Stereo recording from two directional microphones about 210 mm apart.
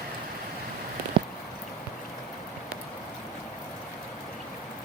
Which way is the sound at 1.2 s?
25° right (ahead or behind).